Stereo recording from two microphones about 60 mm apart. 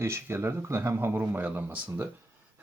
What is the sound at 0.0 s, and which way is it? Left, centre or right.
Speech, right.